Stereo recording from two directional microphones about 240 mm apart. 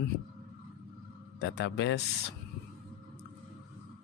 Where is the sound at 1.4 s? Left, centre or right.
Left.